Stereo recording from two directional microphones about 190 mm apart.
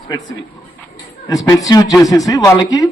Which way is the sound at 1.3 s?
20° left (ahead or behind).